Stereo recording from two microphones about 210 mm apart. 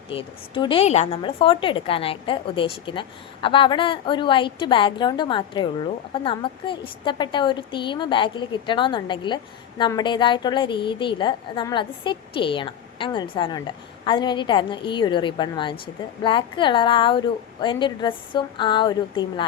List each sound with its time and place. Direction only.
0.1 s a woman's voice: 25° left (ahead or behind)